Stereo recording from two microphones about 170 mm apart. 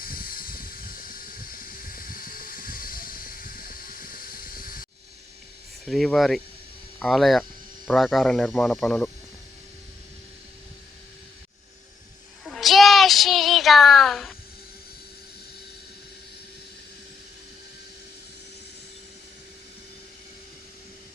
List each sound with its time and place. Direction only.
0.0 s a sound: 60° left (ahead or behind)
5.8 s speech: centre (ahead or behind)
12.5 s child singing: centre (ahead or behind)